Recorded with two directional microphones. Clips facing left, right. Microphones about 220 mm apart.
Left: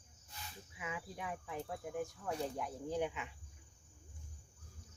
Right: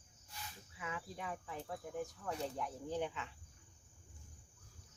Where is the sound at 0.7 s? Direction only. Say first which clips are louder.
Left 1 dB; 15° left (ahead or behind).